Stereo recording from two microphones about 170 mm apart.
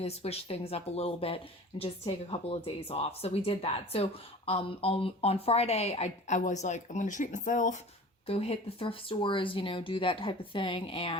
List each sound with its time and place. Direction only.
0.0 s speech: 35° left (ahead or behind)
8.3 s speech: 35° left (ahead or behind)